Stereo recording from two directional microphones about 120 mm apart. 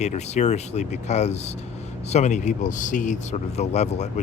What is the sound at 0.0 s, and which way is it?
A man's voice, 70° left (ahead or behind).